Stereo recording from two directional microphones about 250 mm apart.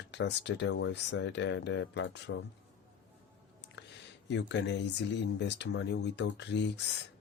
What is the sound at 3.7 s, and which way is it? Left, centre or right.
Speech, left.